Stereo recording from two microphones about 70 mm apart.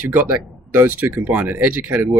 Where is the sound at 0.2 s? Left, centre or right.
Right.